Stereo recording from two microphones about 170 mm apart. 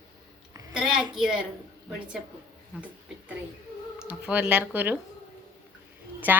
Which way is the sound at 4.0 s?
5° right (ahead or behind).